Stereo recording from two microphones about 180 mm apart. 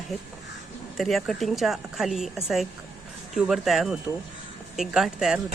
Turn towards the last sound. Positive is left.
turn(degrees=-5)  # may be behind; listen again after turning